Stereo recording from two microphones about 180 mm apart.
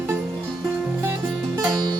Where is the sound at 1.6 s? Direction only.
25° right (ahead or behind).